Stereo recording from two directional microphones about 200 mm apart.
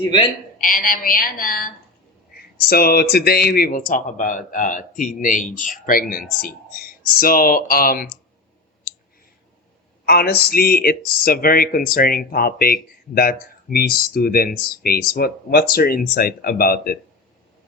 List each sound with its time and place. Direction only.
0.6 s speech: 40° left (ahead or behind)
10.1 s speech: 50° left (ahead or behind)